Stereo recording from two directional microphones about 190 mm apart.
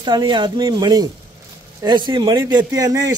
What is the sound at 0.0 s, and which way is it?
Speech, 25° right (ahead or behind).